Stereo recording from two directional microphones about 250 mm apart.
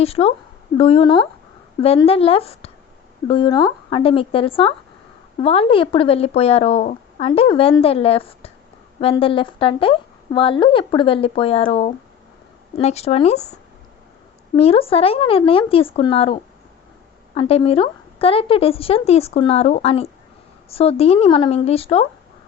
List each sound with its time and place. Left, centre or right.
0.0 s a woman's voice: left
14.5 s a woman's voice: left